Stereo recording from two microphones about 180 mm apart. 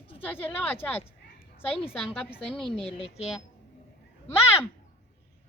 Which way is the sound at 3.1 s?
5° right (ahead or behind).